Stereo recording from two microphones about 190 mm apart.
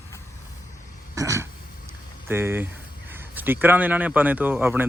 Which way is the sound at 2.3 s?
10° right (ahead or behind).